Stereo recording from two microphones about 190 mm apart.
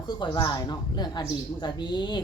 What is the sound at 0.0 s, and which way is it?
Speech, 20° left (ahead or behind).